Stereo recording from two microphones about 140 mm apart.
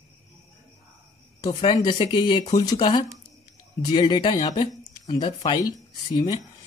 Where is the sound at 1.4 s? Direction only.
35° left (ahead or behind).